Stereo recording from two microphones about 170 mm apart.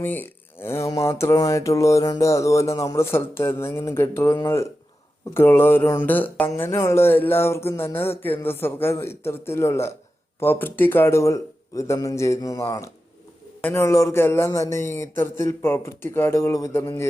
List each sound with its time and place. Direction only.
0.0 s speech: 10° left (ahead or behind)